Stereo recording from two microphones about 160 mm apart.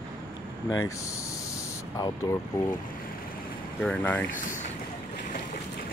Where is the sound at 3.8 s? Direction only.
10° left (ahead or behind).